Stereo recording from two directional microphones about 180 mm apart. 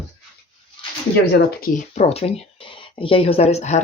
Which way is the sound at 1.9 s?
35° left (ahead or behind).